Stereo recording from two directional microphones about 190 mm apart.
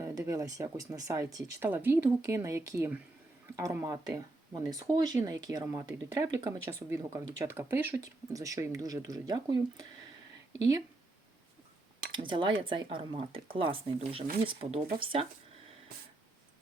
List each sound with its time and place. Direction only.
0.0 s speech: 15° right (ahead or behind)
12.1 s speech: 25° right (ahead or behind)